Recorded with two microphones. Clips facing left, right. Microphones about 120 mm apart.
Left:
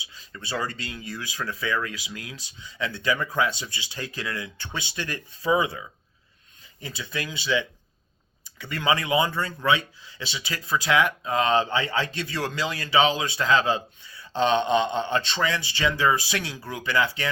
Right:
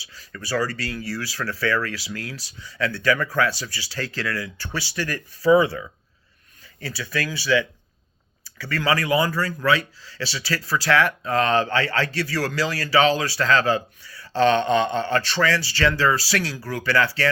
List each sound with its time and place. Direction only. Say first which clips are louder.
0.0 s speech: right 3 dB; 20° left (ahead or behind)